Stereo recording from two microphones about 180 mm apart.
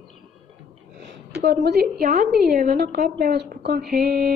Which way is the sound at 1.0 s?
70° right (ahead or behind).